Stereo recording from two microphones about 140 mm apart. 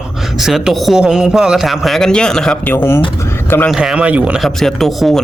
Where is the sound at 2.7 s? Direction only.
15° left (ahead or behind).